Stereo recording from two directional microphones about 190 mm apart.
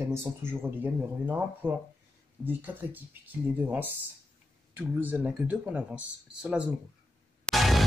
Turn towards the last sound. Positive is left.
turn(degrees=0)  # may be behind; listen again after turning